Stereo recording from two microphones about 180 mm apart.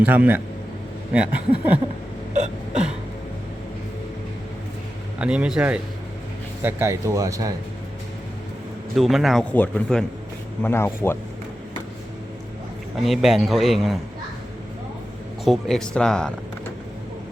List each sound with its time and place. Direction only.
0.0 s speech: 10° right (ahead or behind)
5.2 s speech: 5° right (ahead or behind)
9.0 s a man's voice: centre (ahead or behind)
13.0 s a man's voice: centre (ahead or behind)
15.4 s speech: centre (ahead or behind)